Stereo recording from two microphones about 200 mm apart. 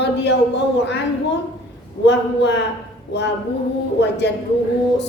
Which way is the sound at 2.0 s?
60° left (ahead or behind).